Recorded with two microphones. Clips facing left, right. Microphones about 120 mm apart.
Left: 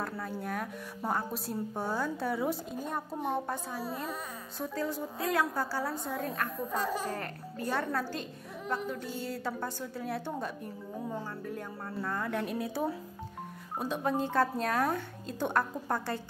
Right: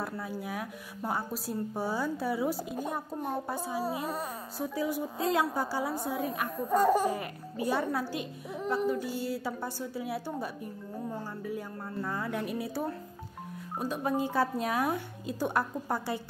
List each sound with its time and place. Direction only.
0.0 s a child's voice: 5° right (ahead or behind)
6.7 s speech: 50° right (ahead or behind)
7.1 s a child's voice: 10° right (ahead or behind)